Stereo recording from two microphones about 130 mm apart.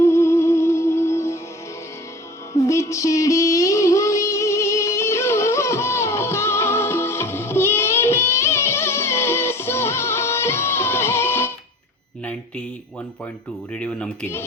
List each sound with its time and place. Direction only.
0.0 s music: 20° left (ahead or behind)
2.5 s music: 20° left (ahead or behind)
12.2 s a sound: 10° left (ahead or behind)
13.7 s speech: 10° left (ahead or behind)